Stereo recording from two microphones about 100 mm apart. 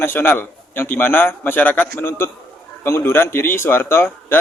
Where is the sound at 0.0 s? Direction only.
20° left (ahead or behind).